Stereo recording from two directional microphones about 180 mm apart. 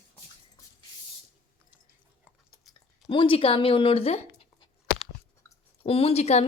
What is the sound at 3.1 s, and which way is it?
Speech, 30° left (ahead or behind).